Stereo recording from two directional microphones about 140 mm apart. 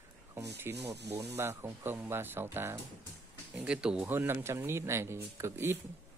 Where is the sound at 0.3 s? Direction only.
15° right (ahead or behind).